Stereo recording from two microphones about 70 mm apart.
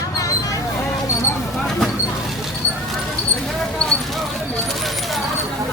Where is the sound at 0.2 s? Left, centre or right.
Left.